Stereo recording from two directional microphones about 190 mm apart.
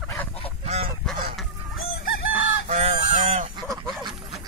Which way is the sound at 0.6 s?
30° right (ahead or behind).